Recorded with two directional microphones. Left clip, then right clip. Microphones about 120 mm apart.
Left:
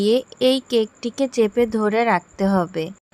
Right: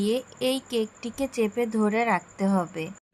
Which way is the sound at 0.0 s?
55° left (ahead or behind).